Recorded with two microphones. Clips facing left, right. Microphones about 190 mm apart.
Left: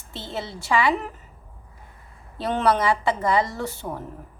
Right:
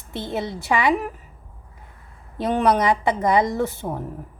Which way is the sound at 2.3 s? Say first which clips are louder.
Right 2 dB; 15° right (ahead or behind).